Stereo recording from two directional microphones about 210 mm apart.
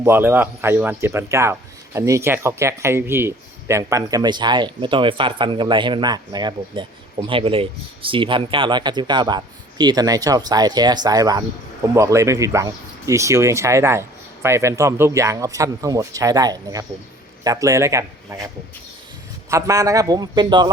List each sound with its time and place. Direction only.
0.0 s speech: 10° right (ahead or behind)
19.5 s speech: 15° right (ahead or behind)